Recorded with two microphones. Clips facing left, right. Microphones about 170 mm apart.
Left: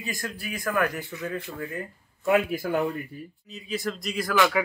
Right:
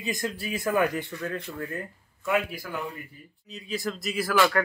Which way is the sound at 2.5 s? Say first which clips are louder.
Left 9 dB; 50° left (ahead or behind).